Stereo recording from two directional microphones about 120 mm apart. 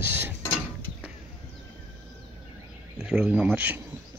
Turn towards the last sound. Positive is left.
turn(degrees=-10)  # may be behind; listen again after turning